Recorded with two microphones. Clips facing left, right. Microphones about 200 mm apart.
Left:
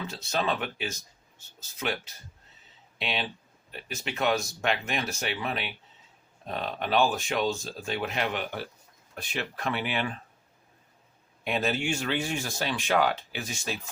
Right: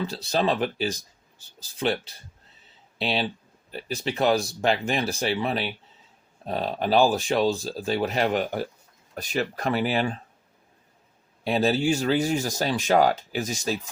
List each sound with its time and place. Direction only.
0.1 s speech: 35° right (ahead or behind)
11.4 s speech: 35° right (ahead or behind)